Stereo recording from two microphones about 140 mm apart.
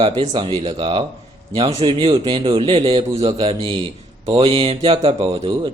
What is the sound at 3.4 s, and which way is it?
Speech, 35° right (ahead or behind).